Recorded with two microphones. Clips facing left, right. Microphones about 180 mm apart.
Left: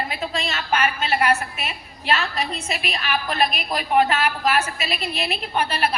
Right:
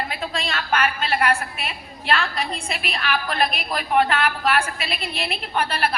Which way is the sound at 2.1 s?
5° left (ahead or behind).